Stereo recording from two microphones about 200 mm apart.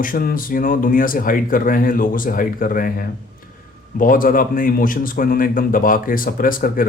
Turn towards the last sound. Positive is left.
turn(degrees=45)  # may be behind; listen again after turning